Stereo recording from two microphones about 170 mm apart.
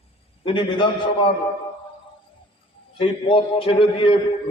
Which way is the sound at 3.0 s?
30° left (ahead or behind).